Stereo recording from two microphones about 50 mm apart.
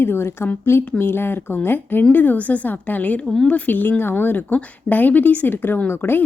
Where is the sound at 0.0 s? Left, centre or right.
Left.